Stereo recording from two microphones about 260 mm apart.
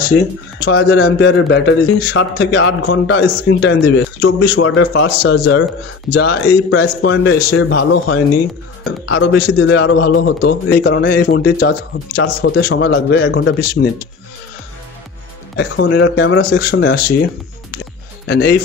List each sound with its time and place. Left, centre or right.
0.7 s a man's voice: left
15.5 s a man's voice: left
18.2 s speech: left